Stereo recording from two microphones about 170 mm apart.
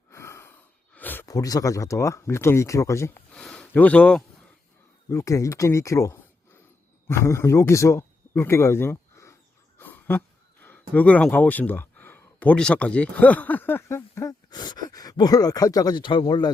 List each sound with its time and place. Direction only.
0.1 s a sound: 15° left (ahead or behind)
0.9 s speech: 10° left (ahead or behind)
3.3 s speech: 5° left (ahead or behind)
5.0 s speech: 20° left (ahead or behind)